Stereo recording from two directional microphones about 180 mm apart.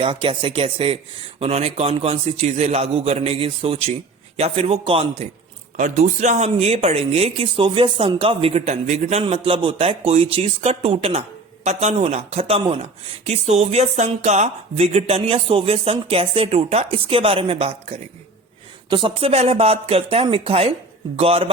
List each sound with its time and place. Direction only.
0.0 s speech: 30° right (ahead or behind)
5.7 s speech: 45° right (ahead or behind)